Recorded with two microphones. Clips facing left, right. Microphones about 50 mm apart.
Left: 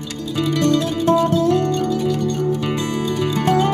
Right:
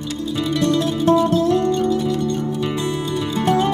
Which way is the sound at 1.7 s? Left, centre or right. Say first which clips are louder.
Right 2 dB; right.